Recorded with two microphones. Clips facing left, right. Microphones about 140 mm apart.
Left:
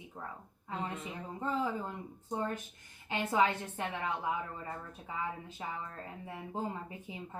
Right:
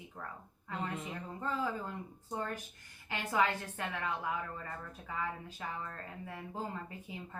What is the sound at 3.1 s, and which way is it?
A woman's voice, 20° left (ahead or behind).